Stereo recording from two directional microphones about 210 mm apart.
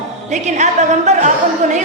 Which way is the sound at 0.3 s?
35° right (ahead or behind).